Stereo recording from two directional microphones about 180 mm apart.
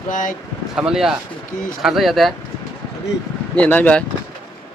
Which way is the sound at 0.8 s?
5° right (ahead or behind).